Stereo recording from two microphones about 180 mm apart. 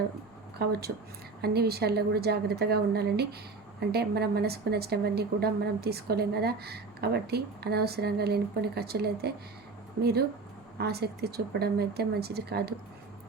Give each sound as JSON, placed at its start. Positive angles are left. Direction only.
{"t": 0.6, "sound": "a woman's voice", "side_deg": -60}